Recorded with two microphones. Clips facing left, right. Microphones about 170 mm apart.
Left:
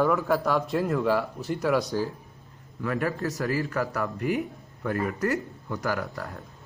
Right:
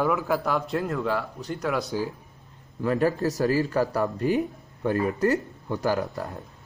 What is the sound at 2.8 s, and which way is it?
Speech, 30° right (ahead or behind).